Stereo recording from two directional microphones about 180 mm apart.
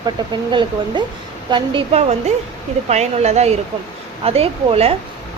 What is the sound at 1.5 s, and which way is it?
A woman's voice, 25° right (ahead or behind).